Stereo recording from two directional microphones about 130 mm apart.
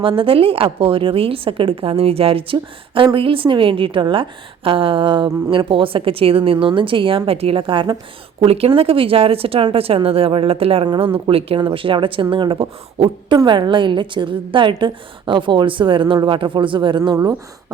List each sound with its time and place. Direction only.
0.2 s a woman's voice: 45° right (ahead or behind)